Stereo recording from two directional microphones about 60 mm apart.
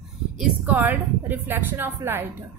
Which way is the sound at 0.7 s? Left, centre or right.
Right.